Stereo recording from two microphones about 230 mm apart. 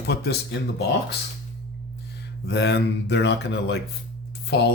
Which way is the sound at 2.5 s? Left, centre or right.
Left.